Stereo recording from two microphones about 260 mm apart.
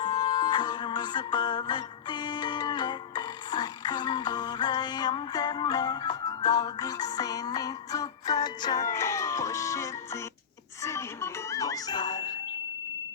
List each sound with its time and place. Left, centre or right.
0.0 s music: centre